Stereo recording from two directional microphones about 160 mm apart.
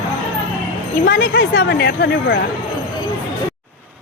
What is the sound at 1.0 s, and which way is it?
A woman's voice, 90° left.